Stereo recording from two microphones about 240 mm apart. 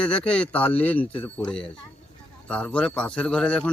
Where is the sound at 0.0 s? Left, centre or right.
Centre.